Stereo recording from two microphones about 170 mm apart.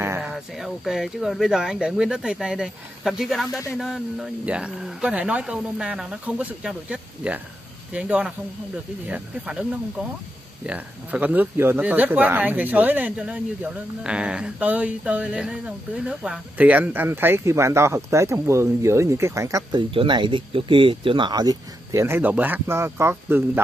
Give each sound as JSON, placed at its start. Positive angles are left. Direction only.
{"t": 0.2, "sound": "speech", "side_deg": 0}
{"t": 19.9, "sound": "speech", "side_deg": -30}